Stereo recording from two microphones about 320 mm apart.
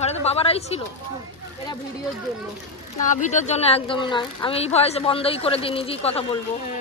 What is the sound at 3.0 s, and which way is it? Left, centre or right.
Speech, left.